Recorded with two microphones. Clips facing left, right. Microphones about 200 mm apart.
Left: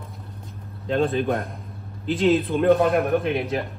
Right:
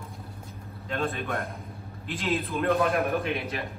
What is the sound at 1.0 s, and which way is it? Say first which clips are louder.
Speech: left 8 dB; centre (ahead or behind).